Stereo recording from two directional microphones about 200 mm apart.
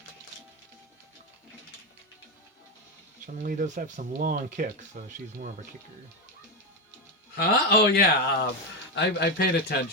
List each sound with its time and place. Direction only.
3.3 s speech: 45° right (ahead or behind)
7.3 s a man's voice: 50° left (ahead or behind)